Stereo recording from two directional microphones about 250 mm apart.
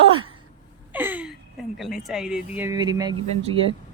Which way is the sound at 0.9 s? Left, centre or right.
Centre.